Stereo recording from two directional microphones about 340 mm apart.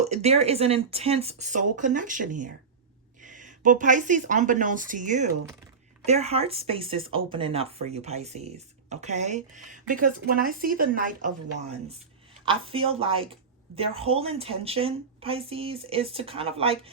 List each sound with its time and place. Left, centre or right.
0.0 s speech: centre